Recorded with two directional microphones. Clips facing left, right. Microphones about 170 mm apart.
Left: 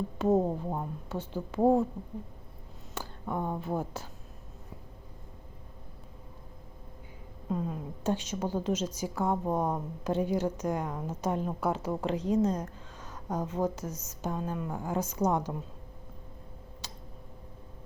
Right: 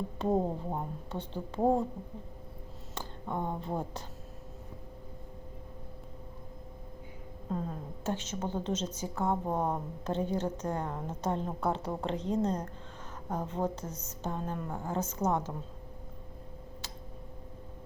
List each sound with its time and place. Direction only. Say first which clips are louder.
0.2 s a woman's voice: left 4 dB; 5° left (ahead or behind)
2.9 s speech: left 2 dB; 5° left (ahead or behind)
7.5 s a woman's voice: left 3 dB; 10° left (ahead or behind)
13.2 s speech: left 2 dB; 10° right (ahead or behind)
13.5 s a woman's voice: left 3 dB; 10° left (ahead or behind)